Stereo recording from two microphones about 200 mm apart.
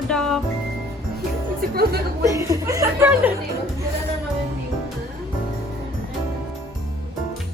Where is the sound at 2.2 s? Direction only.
15° right (ahead or behind).